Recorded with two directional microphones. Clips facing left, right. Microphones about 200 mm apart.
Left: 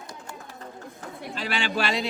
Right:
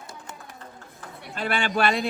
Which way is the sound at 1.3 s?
55° right (ahead or behind).